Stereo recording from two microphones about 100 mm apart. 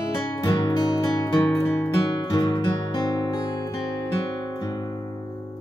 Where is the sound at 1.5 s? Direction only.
25° left (ahead or behind).